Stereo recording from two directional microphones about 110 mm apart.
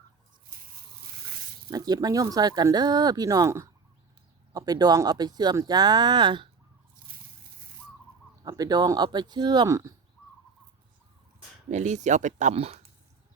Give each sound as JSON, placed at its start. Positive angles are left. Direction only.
{"t": 1.7, "sound": "speech", "side_deg": -35}
{"t": 8.4, "sound": "speech", "side_deg": -35}
{"t": 11.7, "sound": "speech", "side_deg": -90}